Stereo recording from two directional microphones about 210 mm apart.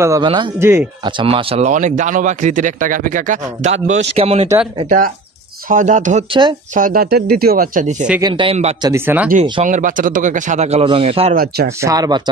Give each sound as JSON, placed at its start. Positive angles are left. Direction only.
{"t": 0.0, "sound": "speech", "side_deg": -20}
{"t": 1.1, "sound": "a man's voice", "side_deg": -25}
{"t": 8.2, "sound": "a man's voice", "side_deg": -20}
{"t": 8.8, "sound": "speech", "side_deg": -10}
{"t": 9.3, "sound": "a man's voice", "side_deg": -35}
{"t": 11.3, "sound": "speech", "side_deg": -50}
{"t": 11.8, "sound": "speech", "side_deg": -15}